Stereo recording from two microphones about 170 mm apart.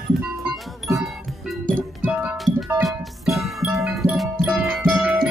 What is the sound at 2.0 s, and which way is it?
Music, 10° right (ahead or behind).